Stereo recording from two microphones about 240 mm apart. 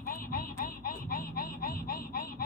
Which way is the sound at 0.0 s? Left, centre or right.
Left.